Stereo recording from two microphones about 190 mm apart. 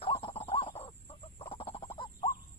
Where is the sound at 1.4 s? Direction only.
30° left (ahead or behind).